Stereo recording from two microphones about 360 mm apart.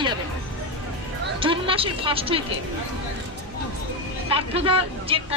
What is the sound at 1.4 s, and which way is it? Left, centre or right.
Speech, centre.